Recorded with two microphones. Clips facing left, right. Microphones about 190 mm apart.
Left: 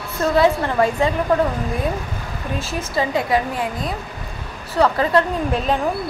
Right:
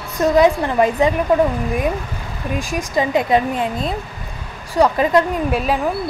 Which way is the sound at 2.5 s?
15° right (ahead or behind).